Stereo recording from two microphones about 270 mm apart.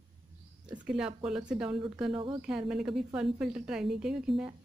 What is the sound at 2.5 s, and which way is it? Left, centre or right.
Speech, centre.